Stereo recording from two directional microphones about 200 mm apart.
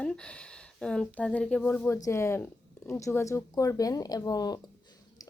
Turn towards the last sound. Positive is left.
turn(degrees=20)  # may be behind; listen again after turning